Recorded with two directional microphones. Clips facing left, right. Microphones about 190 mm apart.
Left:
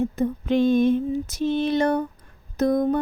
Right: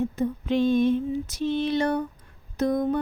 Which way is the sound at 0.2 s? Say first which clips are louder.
Left 3 dB; 50° left (ahead or behind).